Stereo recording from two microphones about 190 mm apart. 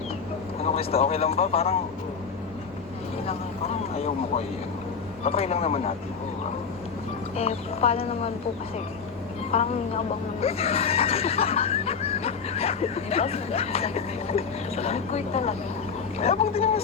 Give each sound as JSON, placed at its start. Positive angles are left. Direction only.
{"t": 0.6, "sound": "neigh", "side_deg": 30}
{"t": 3.2, "sound": "speech", "side_deg": 30}
{"t": 5.2, "sound": "neigh", "side_deg": 30}
{"t": 7.3, "sound": "neigh", "side_deg": 30}
{"t": 9.5, "sound": "neigh", "side_deg": 30}